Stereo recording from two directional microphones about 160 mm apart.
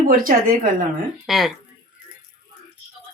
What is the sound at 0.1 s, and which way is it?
Speech, 60° right (ahead or behind).